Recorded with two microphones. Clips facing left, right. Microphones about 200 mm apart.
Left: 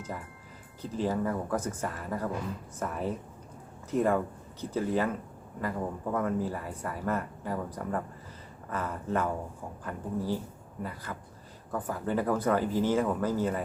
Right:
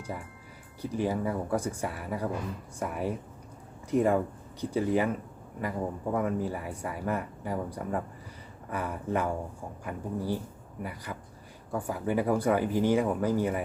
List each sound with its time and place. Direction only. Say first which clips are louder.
0.8 s speech: right 1 dB; 10° right (ahead or behind)